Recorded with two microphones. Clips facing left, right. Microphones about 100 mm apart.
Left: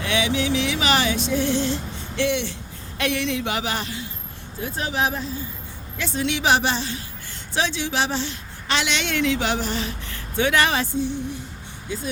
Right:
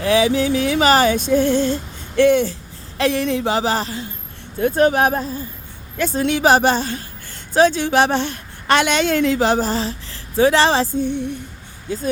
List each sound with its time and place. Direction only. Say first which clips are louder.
0.0 s music: right 7 dB; 35° right (ahead or behind)
3.0 s speech: right 6 dB; 35° right (ahead or behind)
4.6 s music: right 10 dB; 50° right (ahead or behind)
7.5 s a woman's voice: right 10 dB; 45° right (ahead or behind)
10.9 s music: right 4 dB; 55° right (ahead or behind)
11.9 s speech: right 5 dB; 40° right (ahead or behind)